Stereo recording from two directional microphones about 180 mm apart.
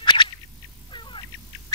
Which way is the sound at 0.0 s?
25° left (ahead or behind).